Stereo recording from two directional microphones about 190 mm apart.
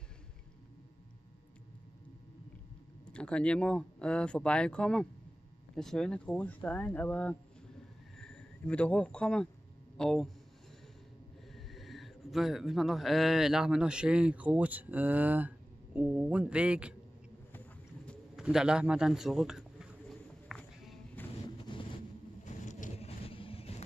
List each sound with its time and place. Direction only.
3.1 s speech: 5° left (ahead or behind)
11.5 s speech: centre (ahead or behind)
18.0 s bird: 5° right (ahead or behind)
22.4 s vehicle: 40° left (ahead or behind)